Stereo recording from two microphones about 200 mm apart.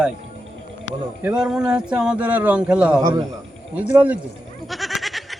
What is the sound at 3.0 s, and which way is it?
A man's voice, 15° right (ahead or behind).